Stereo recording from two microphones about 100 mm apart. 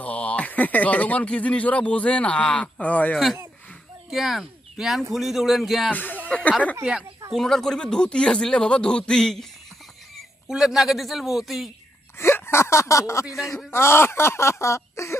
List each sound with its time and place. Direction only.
0.0 s speech: 15° left (ahead or behind)
4.1 s a man's voice: centre (ahead or behind)
5.9 s speech: 20° left (ahead or behind)
6.8 s speech: 5° right (ahead or behind)
7.3 s speech: 5° left (ahead or behind)
12.2 s speech: 25° left (ahead or behind)
13.4 s a man's voice: centre (ahead or behind)
13.7 s speech: 25° left (ahead or behind)